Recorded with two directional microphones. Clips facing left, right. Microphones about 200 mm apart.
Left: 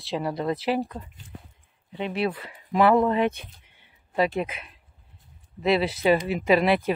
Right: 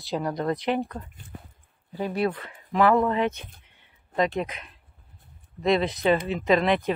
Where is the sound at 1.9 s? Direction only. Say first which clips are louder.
Right 1 dB; 25° left (ahead or behind); by 4.6 s 10° left (ahead or behind).